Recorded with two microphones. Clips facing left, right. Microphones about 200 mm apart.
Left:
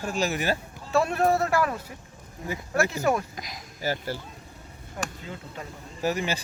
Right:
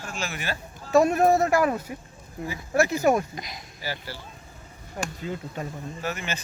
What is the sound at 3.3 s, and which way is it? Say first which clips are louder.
Speech: right 2 dB; centre (ahead or behind).